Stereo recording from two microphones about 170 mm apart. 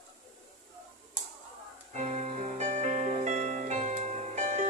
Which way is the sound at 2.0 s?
45° right (ahead or behind).